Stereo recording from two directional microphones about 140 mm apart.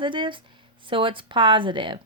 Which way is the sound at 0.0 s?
35° right (ahead or behind).